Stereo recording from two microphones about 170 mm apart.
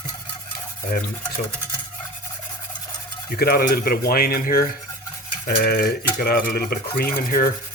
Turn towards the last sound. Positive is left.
turn(degrees=60)  # may be behind; listen again after turning